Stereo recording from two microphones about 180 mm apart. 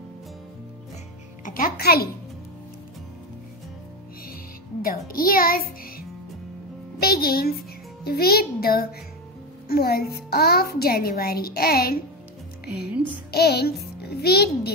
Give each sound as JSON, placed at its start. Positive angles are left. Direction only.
{"t": 1.4, "sound": "a child's voice", "side_deg": 50}
{"t": 4.8, "sound": "speech", "side_deg": 55}
{"t": 7.0, "sound": "music", "side_deg": 55}
{"t": 8.0, "sound": "a woman's voice", "side_deg": 60}
{"t": 12.7, "sound": "a woman's voice", "side_deg": -10}
{"t": 13.3, "sound": "a child's voice", "side_deg": 65}